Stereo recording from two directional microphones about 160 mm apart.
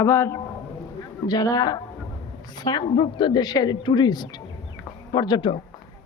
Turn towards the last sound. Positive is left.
turn(degrees=25)  # may be behind; listen again after turning